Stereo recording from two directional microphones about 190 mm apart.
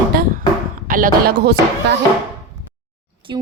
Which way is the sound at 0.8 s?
45° right (ahead or behind).